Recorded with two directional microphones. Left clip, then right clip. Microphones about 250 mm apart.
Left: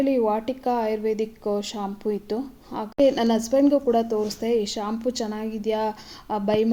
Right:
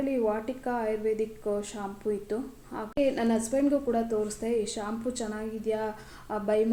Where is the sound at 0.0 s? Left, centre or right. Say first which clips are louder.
Left 6 dB; left.